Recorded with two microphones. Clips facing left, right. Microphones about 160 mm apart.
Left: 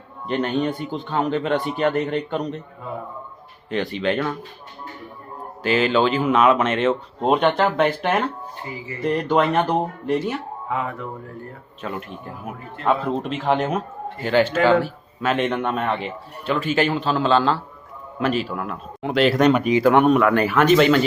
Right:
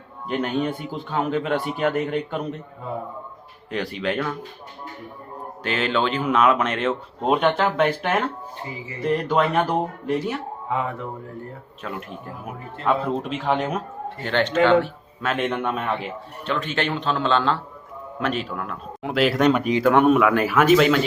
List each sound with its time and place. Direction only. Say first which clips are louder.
0.3 s a man's voice: left 2 dB; 5° right (ahead or behind)
3.7 s a man's voice: left 3 dB; centre (ahead or behind)
5.6 s a man's voice: left 5 dB; 5° left (ahead or behind)
10.7 s speech: even; 25° right (ahead or behind)
11.8 s a man's voice: left 3 dB; centre (ahead or behind)